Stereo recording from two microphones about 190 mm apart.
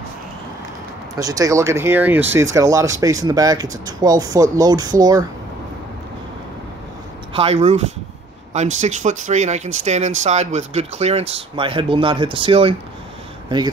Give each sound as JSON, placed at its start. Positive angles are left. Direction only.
{"t": 1.1, "sound": "speech", "side_deg": -20}
{"t": 7.3, "sound": "speech", "side_deg": -30}